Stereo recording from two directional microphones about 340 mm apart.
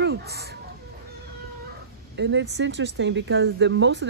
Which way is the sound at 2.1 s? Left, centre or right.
Right.